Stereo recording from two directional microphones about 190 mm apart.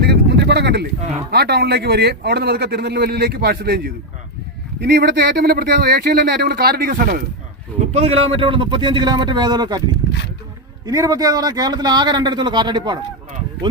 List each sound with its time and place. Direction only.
0.0 s a sound: 60° right (ahead or behind)
1.3 s speech: 60° right (ahead or behind)
7.9 s a man's voice: 35° right (ahead or behind)
10.8 s a man's voice: 20° right (ahead or behind)